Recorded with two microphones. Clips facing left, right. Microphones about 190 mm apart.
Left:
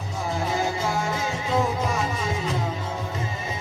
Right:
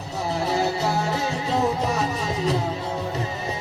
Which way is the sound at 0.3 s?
35° right (ahead or behind).